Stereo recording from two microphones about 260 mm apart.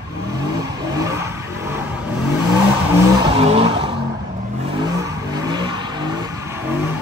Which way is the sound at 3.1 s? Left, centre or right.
Centre.